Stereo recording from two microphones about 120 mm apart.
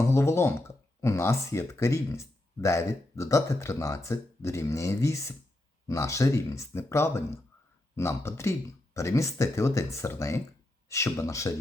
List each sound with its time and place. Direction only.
0.1 s speech: 20° left (ahead or behind)